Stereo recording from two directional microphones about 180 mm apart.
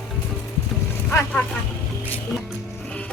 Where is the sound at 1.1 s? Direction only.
15° left (ahead or behind).